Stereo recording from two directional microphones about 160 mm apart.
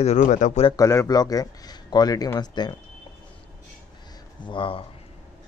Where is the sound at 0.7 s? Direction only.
20° left (ahead or behind).